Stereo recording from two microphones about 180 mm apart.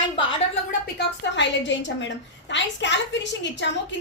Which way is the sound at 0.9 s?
75° left (ahead or behind).